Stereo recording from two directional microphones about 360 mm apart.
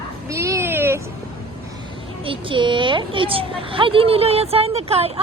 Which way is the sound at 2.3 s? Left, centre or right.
Centre.